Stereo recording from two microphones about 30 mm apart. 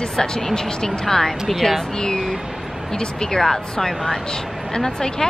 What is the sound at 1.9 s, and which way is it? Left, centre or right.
A woman's voice, left.